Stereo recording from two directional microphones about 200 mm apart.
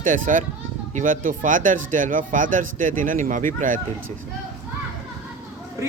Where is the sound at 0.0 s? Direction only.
40° right (ahead or behind).